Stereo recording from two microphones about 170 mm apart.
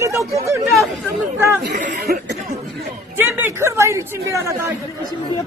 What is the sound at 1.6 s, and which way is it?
Speech, 60° right (ahead or behind).